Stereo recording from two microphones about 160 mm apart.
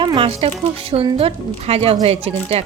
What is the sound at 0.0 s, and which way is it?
A woman's voice, 30° right (ahead or behind).